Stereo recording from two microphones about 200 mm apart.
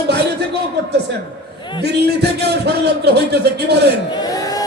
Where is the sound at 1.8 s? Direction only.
55° right (ahead or behind).